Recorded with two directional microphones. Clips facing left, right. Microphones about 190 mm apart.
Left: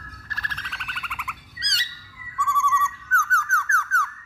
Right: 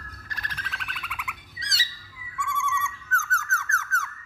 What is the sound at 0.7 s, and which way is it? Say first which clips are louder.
Bird: even; centre (ahead or behind).